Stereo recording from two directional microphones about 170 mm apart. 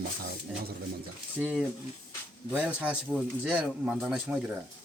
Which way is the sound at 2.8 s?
5° right (ahead or behind).